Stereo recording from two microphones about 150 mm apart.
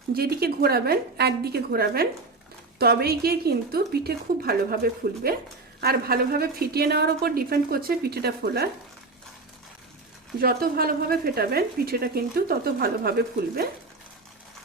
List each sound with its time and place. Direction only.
0.1 s speech: 90° right
10.4 s speech: 85° right